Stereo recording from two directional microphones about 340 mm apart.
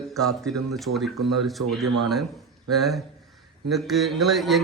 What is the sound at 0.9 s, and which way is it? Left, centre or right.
Speech, right.